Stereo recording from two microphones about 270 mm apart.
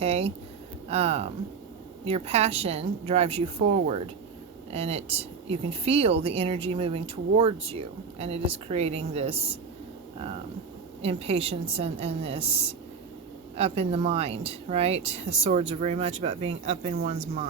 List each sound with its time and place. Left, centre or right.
0.0 s speech: right
11.0 s speech: right